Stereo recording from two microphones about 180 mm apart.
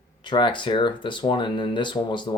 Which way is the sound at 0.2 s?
25° left (ahead or behind).